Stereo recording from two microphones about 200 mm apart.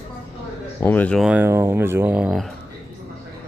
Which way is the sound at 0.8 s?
10° left (ahead or behind).